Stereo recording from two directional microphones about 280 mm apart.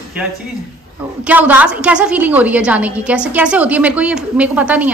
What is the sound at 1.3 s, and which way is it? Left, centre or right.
A woman's voice, centre.